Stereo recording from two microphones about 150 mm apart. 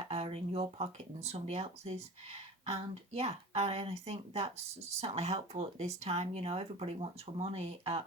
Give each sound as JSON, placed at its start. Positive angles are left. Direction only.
{"t": 0.1, "sound": "speech", "side_deg": -40}